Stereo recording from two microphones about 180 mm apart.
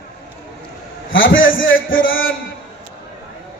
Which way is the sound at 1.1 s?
90° left.